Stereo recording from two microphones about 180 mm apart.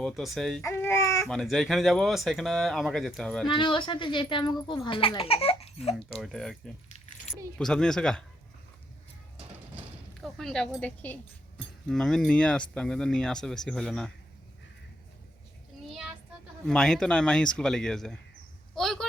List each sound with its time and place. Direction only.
0.0 s speech: centre (ahead or behind)
0.6 s baby cry: 15° left (ahead or behind)
1.3 s speech: centre (ahead or behind)
3.5 s speech: 25° left (ahead or behind)
6.1 s speech: centre (ahead or behind)
10.2 s speech: centre (ahead or behind)
15.9 s child singing: centre (ahead or behind)
16.6 s speech: 5° left (ahead or behind)
18.7 s a sound: centre (ahead or behind)